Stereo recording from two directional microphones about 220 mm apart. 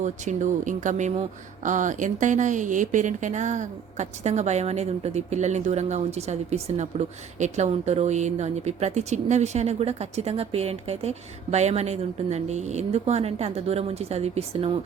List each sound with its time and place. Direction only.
0.0 s speech: 35° right (ahead or behind)